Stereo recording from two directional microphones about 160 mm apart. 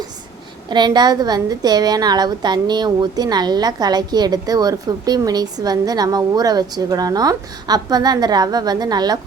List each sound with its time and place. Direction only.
0.7 s a woman's voice: 25° right (ahead or behind)